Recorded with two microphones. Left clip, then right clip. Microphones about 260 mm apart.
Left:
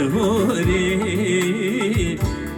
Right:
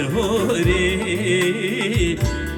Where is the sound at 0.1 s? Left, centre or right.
Right.